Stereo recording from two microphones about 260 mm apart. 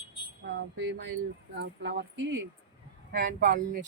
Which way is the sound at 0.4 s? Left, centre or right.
Right.